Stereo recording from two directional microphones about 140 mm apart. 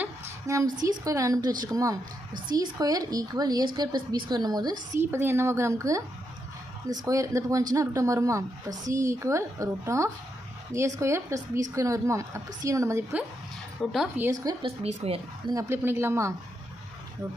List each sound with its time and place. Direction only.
0.0 s a sound: 20° right (ahead or behind)
1.0 s a woman's voice: 25° right (ahead or behind)
4.9 s a woman's voice: 15° right (ahead or behind)
13.8 s a woman's voice: centre (ahead or behind)
14.2 s a woman's voice: 25° right (ahead or behind)
14.6 s speech: 40° right (ahead or behind)
15.5 s speech: 15° right (ahead or behind)